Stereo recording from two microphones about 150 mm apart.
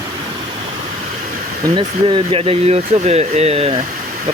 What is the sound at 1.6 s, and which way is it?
Speech, 30° right (ahead or behind).